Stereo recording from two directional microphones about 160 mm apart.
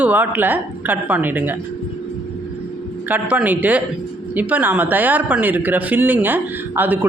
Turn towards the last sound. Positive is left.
turn(degrees=-10)  # may be behind; listen again after turning